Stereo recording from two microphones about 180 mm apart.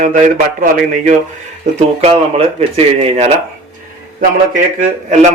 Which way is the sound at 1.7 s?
35° right (ahead or behind).